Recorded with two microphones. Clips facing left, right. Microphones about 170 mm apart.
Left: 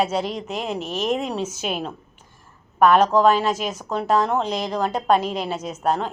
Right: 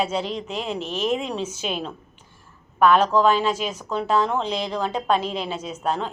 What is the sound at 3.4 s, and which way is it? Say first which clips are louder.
Speech: left 1 dB; 45° left (ahead or behind).